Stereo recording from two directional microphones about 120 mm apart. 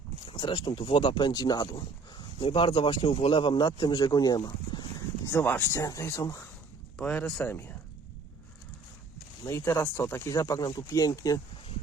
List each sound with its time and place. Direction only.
0.3 s speech: 45° left (ahead or behind)
5.2 s speech: 20° left (ahead or behind)
7.0 s speech: 10° left (ahead or behind)
9.5 s speech: 20° left (ahead or behind)